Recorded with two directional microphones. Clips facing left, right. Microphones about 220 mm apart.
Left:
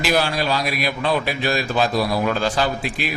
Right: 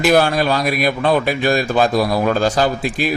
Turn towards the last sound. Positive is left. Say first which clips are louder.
# right 5 dB
turn(degrees=-45)  # may be behind; listen again after turning